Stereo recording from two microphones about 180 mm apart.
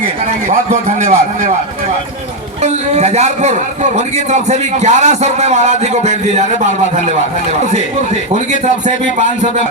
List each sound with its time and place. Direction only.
0.0 s a man's voice: 45° right (ahead or behind)
2.6 s a man's voice: 40° right (ahead or behind)